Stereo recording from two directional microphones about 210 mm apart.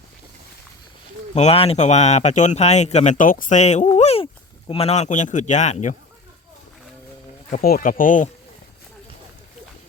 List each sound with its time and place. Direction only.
1.4 s speech: 30° left (ahead or behind)
7.5 s speech: 45° left (ahead or behind)